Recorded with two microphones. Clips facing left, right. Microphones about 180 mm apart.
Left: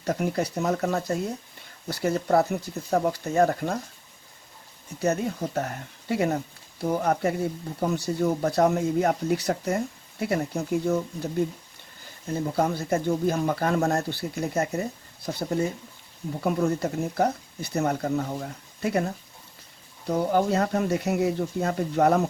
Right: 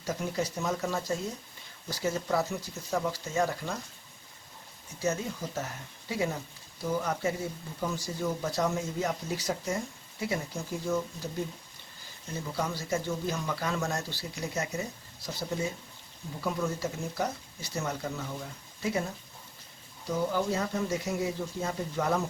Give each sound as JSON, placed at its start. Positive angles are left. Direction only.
{"t": 0.0, "sound": "speech", "side_deg": 60}
{"t": 4.9, "sound": "speech", "side_deg": 60}
{"t": 8.2, "sound": "speech", "side_deg": 55}
{"t": 12.3, "sound": "speech", "side_deg": 55}